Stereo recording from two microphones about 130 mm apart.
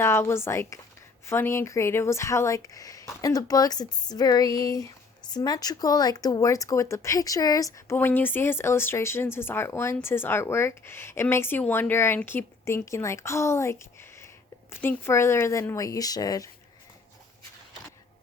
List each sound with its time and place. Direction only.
0.0 s speech: 20° left (ahead or behind)
7.9 s speech: 15° left (ahead or behind)